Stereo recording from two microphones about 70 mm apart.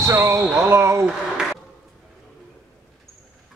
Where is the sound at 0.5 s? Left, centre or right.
Right.